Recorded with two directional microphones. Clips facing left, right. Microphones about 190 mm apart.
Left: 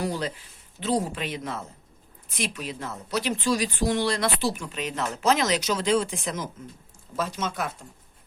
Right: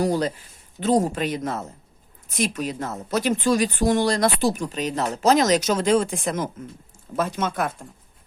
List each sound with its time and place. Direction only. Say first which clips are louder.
0.0 s a woman's voice: right 7 dB; 40° right (ahead or behind)